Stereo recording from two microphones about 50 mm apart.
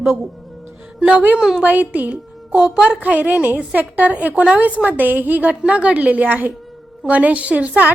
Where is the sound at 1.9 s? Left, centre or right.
Right.